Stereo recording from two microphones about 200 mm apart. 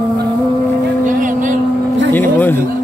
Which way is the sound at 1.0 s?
40° right (ahead or behind).